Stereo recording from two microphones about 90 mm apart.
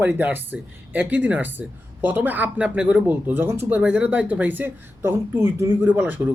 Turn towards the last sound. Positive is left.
turn(degrees=-20)  # may be behind; listen again after turning